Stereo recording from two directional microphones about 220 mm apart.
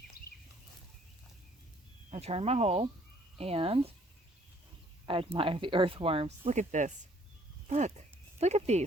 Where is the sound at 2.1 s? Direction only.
30° right (ahead or behind).